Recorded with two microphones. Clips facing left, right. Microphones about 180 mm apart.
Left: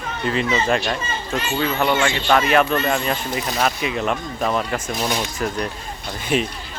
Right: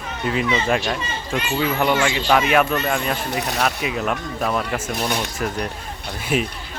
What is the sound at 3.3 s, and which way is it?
Speech, 70° right (ahead or behind).